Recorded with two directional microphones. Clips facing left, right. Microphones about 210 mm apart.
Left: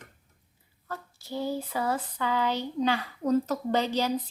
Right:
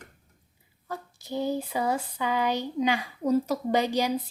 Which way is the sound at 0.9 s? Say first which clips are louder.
Right 2 dB; 15° right (ahead or behind).